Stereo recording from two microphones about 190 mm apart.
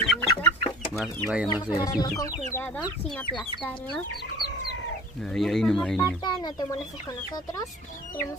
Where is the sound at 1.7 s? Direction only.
15° left (ahead or behind).